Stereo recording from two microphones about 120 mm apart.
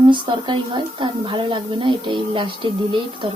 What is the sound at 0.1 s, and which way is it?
A woman's voice, 45° right (ahead or behind).